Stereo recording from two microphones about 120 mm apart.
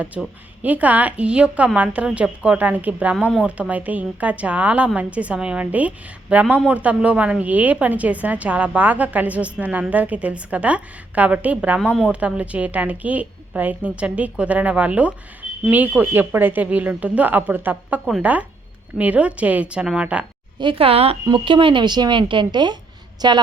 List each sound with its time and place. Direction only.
0.1 s a woman's voice: 5° right (ahead or behind)
20.6 s a woman's voice: 45° right (ahead or behind)
21.2 s speech: 45° right (ahead or behind)